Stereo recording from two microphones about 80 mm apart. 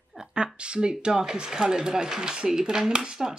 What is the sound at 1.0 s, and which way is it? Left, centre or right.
Speech, centre.